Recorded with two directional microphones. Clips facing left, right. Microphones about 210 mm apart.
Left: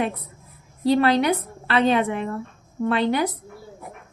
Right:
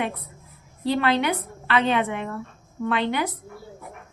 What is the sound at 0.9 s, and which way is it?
A woman's voice, 35° left (ahead or behind).